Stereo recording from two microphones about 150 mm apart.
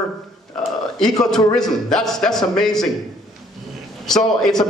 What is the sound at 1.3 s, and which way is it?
A man's voice, 5° left (ahead or behind).